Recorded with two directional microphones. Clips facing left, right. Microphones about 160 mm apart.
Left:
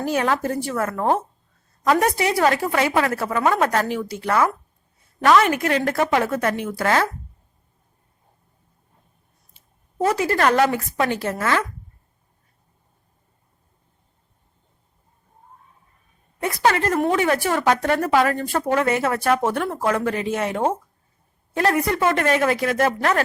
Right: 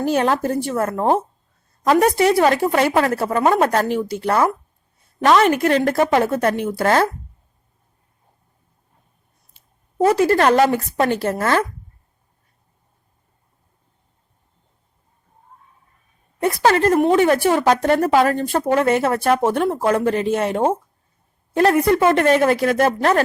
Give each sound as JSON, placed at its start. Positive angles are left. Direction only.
{"t": 0.0, "sound": "a woman's voice", "side_deg": -30}
{"t": 10.2, "sound": "a woman's voice", "side_deg": -30}
{"t": 16.4, "sound": "a woman's voice", "side_deg": -35}